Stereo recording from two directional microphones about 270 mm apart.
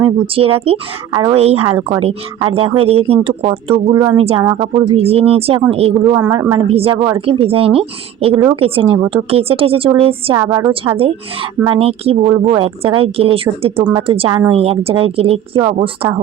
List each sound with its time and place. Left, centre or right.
0.0 s a woman's voice: centre
3.9 s speech: centre
4.2 s a woman's voice: right